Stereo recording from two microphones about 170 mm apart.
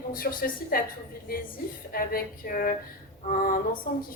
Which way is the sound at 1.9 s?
60° left (ahead or behind).